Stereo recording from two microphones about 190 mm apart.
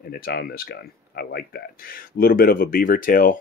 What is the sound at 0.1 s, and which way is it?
Speech, 55° left (ahead or behind).